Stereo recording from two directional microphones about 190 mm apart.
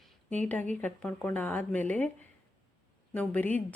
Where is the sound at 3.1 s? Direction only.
10° left (ahead or behind).